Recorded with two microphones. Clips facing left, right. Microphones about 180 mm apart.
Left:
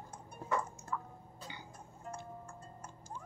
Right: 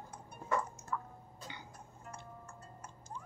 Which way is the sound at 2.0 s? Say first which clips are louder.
Left 5 dB; 30° left (ahead or behind).